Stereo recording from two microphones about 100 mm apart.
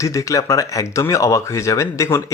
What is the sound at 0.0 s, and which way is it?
Speech, 30° left (ahead or behind).